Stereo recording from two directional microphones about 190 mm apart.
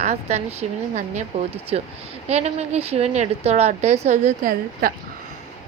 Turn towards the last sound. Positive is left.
turn(degrees=-50)  # may be behind; listen again after turning